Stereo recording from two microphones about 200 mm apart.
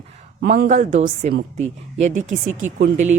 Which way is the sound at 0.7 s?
35° right (ahead or behind).